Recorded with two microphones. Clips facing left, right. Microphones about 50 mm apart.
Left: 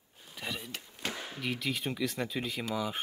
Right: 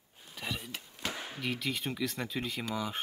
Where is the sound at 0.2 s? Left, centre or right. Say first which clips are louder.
Even; centre.